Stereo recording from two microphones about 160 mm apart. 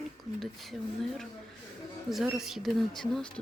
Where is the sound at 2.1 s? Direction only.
Centre (ahead or behind).